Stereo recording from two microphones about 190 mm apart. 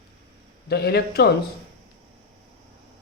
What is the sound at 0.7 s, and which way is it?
Speech, 60° left (ahead or behind).